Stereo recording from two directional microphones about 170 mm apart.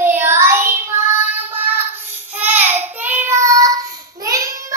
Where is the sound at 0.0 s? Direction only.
15° right (ahead or behind).